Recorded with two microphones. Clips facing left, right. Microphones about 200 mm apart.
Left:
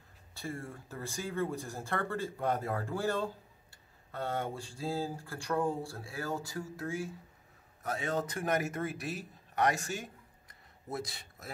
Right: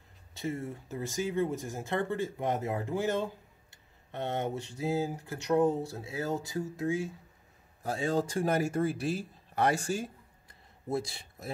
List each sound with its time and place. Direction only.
0.3 s speech: 20° right (ahead or behind)